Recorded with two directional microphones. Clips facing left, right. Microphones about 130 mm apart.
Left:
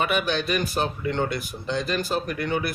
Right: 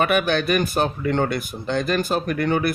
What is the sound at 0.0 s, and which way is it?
Speech, 55° right (ahead or behind).